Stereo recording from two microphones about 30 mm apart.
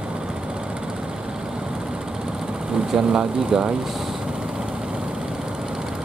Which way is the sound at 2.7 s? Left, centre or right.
Right.